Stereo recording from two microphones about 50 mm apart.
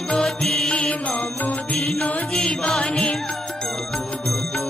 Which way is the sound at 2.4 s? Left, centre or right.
Centre.